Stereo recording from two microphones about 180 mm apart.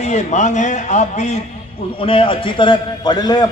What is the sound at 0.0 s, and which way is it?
A man's voice, 40° left (ahead or behind).